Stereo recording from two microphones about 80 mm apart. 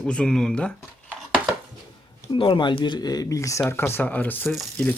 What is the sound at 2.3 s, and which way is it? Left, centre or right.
Speech, left.